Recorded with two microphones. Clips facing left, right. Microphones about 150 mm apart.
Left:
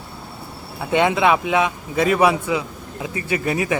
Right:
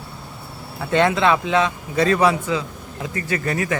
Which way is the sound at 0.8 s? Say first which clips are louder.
Even; 15° left (ahead or behind).